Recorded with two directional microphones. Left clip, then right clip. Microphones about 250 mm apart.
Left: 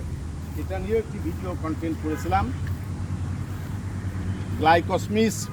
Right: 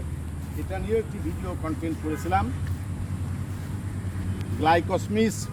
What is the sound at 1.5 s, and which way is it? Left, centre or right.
Speech, centre.